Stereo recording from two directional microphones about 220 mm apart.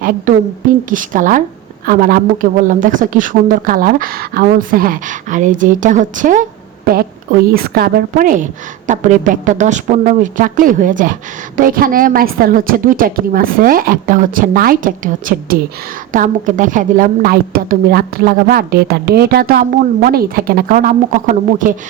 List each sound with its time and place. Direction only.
0.3 s a woman's voice: 35° right (ahead or behind)